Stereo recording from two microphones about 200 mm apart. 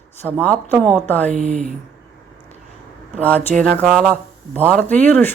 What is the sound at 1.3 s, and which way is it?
Speech, 35° right (ahead or behind).